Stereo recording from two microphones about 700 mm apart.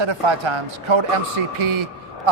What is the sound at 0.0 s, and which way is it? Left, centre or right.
A man's voice, right.